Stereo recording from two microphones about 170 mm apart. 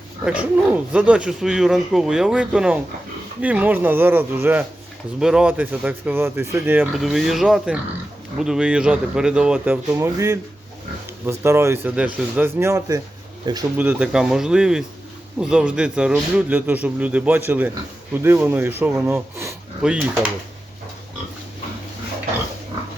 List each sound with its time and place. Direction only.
0.3 s a man's voice: 5° right (ahead or behind)
6.9 s a man's voice: centre (ahead or behind); by 13.7 s 25° right (ahead or behind)
13.7 s a man's voice: 5° right (ahead or behind)